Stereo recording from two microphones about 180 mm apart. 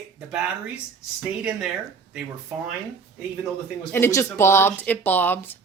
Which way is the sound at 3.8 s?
10° left (ahead or behind).